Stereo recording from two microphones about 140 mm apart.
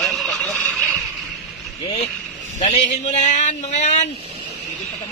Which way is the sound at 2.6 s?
60° left (ahead or behind).